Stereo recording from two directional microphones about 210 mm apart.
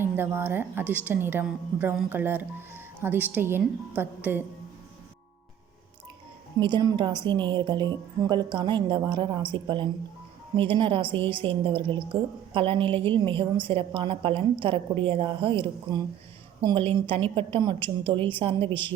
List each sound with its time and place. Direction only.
0.0 s a woman's voice: 10° right (ahead or behind)
6.6 s a woman's voice: 20° right (ahead or behind)